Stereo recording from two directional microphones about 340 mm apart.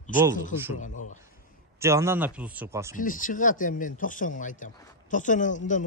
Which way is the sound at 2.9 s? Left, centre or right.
Left.